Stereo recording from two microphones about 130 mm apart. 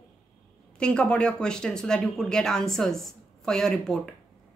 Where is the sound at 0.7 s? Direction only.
5° left (ahead or behind).